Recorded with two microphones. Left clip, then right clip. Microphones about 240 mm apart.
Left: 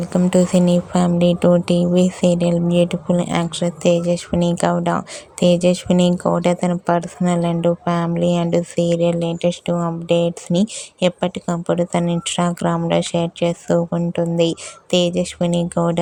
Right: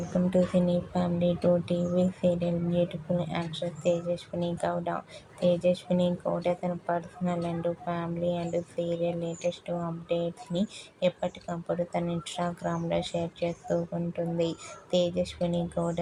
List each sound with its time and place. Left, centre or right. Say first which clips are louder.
0.1 s speech: left 9 dB; left